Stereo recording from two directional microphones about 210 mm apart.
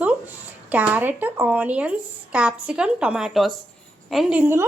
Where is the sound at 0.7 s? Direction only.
5° right (ahead or behind).